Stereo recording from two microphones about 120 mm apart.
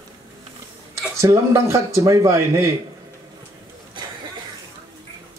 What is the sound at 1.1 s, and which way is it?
Speech, 25° right (ahead or behind).